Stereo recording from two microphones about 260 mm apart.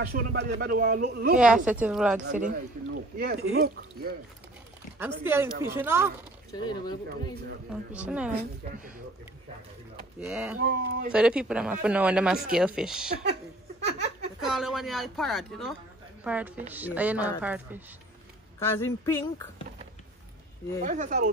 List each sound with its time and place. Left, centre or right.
0.0 s speech: right
1.4 s speech: centre
2.2 s speech: right
4.9 s speech: centre
6.5 s speech: centre
7.9 s speech: centre
8.4 s speech: right
10.2 s speech: centre
13.7 s a sound: right
14.4 s speech: centre
18.6 s speech: centre
20.8 s speech: right